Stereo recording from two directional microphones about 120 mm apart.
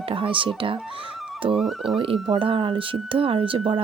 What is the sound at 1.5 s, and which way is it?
Speech, centre (ahead or behind).